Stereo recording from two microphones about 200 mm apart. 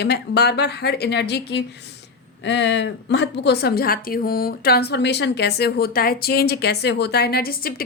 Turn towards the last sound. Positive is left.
turn(degrees=50)  # may be behind; listen again after turning